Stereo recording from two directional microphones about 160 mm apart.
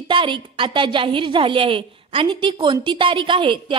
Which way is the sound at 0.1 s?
30° right (ahead or behind).